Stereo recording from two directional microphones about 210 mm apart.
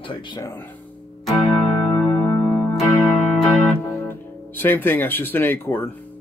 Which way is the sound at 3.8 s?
10° left (ahead or behind).